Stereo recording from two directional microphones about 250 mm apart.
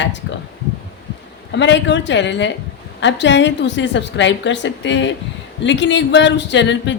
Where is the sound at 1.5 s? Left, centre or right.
Left.